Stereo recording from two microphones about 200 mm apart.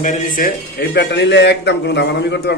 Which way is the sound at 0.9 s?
60° left (ahead or behind).